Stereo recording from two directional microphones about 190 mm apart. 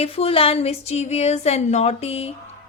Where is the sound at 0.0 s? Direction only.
30° left (ahead or behind).